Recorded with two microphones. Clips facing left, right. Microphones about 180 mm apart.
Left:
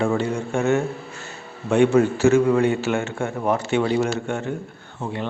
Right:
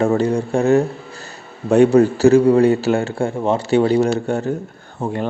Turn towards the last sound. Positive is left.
turn(degrees=-45)  # may be behind; listen again after turning